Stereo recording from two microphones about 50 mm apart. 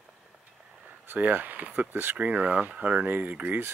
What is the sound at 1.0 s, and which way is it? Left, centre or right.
Speech, right.